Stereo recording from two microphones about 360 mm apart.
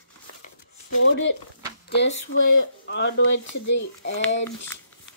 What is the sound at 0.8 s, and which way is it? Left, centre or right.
Speech, left.